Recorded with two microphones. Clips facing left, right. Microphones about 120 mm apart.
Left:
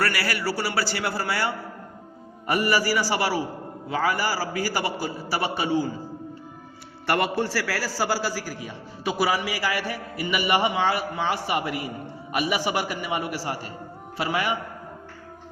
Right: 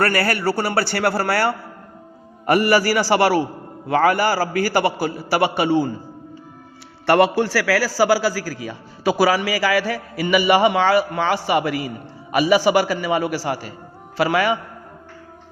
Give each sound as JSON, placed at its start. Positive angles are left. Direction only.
{"t": 0.0, "sound": "a man's voice", "side_deg": -50}
{"t": 7.1, "sound": "a man's voice", "side_deg": -80}